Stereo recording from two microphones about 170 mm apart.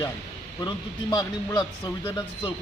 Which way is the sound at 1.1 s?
25° left (ahead or behind).